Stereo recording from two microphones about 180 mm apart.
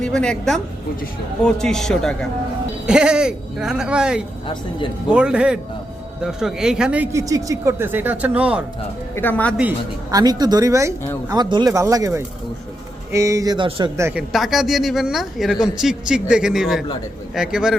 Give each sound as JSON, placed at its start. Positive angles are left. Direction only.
{"t": 0.0, "sound": "a woman's voice", "side_deg": 5}
{"t": 9.1, "sound": "speech", "side_deg": 10}
{"t": 10.1, "sound": "speech", "side_deg": -20}
{"t": 14.1, "sound": "speech", "side_deg": -5}